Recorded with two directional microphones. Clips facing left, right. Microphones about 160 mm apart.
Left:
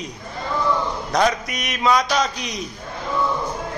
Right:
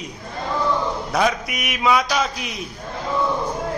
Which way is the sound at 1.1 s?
5° right (ahead or behind).